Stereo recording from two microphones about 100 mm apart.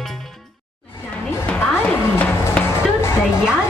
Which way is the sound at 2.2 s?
15° left (ahead or behind).